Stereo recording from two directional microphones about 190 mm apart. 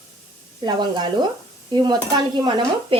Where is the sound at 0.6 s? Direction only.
25° right (ahead or behind).